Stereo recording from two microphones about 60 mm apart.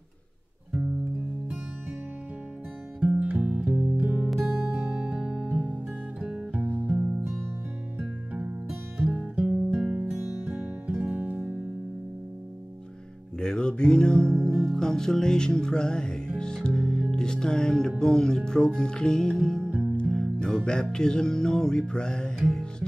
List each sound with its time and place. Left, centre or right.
3.0 s music: right
4.3 s music: centre
4.6 s music: right
4.9 s music: centre
6.9 s music: right
8.3 s music: right
8.9 s music: centre
9.4 s guitar: centre
10.0 s music: centre
10.4 s music: right
13.4 s music: centre